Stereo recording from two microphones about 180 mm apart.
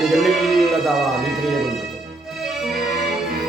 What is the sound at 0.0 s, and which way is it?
Music, centre (ahead or behind).